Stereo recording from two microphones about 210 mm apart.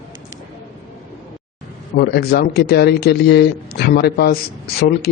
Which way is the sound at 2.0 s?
50° left (ahead or behind).